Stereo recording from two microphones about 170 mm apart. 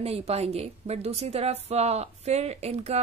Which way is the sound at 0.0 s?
35° right (ahead or behind).